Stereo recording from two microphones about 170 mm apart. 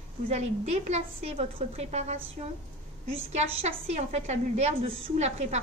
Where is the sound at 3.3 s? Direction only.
40° right (ahead or behind).